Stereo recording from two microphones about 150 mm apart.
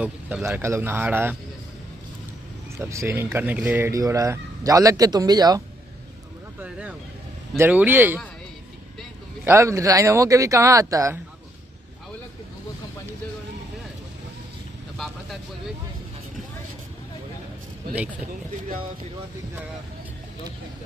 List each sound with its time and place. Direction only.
0.0 s a man's voice: 15° right (ahead or behind)
2.8 s speech: 20° right (ahead or behind)
6.6 s a sound: 10° right (ahead or behind)
7.5 s a man's voice: 15° right (ahead or behind)
9.4 s speech: 20° right (ahead or behind)